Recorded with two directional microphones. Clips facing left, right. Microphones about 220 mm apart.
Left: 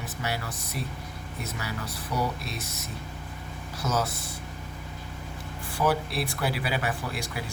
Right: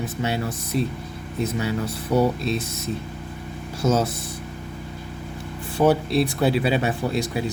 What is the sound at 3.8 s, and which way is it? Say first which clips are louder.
Speech: right 8 dB; 25° right (ahead or behind).